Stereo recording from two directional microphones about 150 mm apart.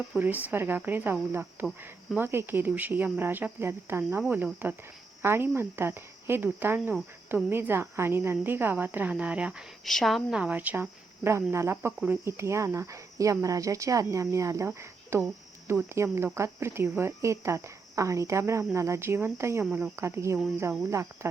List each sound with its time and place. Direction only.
0.2 s speech: 10° right (ahead or behind)